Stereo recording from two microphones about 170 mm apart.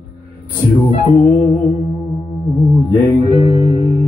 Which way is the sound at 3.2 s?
35° left (ahead or behind).